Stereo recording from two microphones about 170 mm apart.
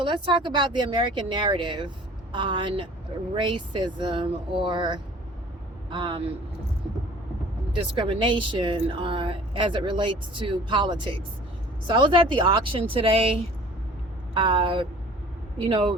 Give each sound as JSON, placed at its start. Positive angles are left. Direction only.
{"t": 0.0, "sound": "a woman's voice", "side_deg": -30}
{"t": 7.7, "sound": "a woman's voice", "side_deg": -30}